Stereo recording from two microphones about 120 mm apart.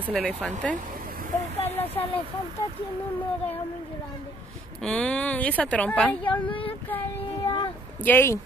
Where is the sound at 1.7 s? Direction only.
15° left (ahead or behind).